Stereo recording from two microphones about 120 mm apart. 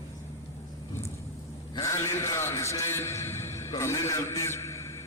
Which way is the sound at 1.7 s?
25° left (ahead or behind).